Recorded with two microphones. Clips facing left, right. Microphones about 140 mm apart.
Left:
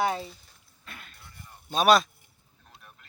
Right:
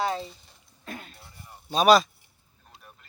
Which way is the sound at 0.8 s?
40° right (ahead or behind).